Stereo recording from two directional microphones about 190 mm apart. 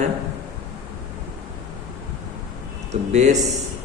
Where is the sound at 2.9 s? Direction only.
35° right (ahead or behind).